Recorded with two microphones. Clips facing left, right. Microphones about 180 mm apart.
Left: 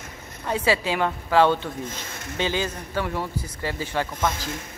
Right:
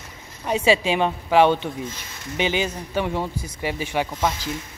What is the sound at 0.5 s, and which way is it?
A woman's voice, 15° right (ahead or behind).